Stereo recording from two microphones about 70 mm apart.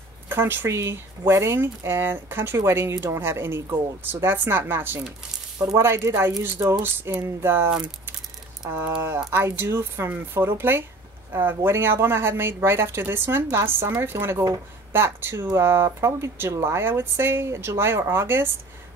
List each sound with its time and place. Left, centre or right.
0.3 s a woman's voice: right
6.0 s a woman's voice: right